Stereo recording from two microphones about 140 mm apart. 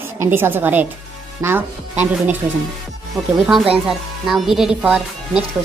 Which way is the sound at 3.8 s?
Centre (ahead or behind).